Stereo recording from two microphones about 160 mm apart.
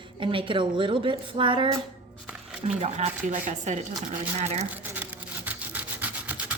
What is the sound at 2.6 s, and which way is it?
Speech, 45° right (ahead or behind).